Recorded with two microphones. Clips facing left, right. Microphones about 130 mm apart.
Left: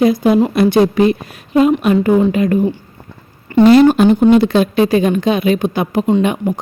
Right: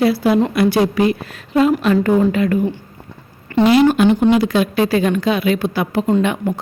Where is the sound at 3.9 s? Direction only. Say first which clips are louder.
Left 3 dB; 40° left (ahead or behind).